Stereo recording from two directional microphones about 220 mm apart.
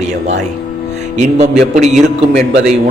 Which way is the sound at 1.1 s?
30° right (ahead or behind).